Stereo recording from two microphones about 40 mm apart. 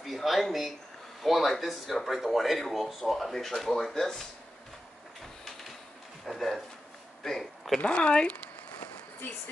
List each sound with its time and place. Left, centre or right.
0.0 s speech: centre
5.4 s printer: centre
6.2 s speech: centre
7.8 s speech: left